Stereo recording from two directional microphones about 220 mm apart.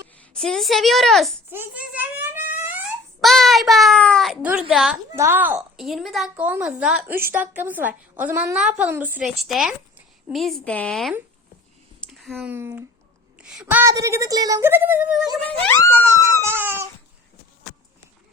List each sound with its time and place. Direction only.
0.2 s a child's voice: centre (ahead or behind)
15.4 s speech: 10° left (ahead or behind)
16.1 s a sound: 15° right (ahead or behind)